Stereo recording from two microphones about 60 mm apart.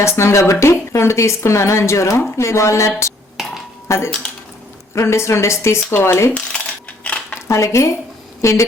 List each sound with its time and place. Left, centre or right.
0.0 s a woman's voice: left
5.9 s speech: left
7.0 s dishes: left
7.4 s speech: left